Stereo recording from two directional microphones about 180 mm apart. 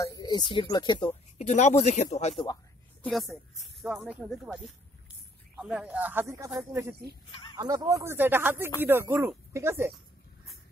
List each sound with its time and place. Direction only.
0.0 s speech: 20° left (ahead or behind)
1.4 s speech: 40° left (ahead or behind)
3.0 s speech: centre (ahead or behind)